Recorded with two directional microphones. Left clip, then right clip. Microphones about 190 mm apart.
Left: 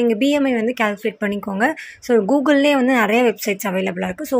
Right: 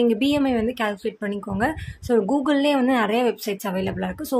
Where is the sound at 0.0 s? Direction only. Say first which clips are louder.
Left 3 dB; 10° left (ahead or behind).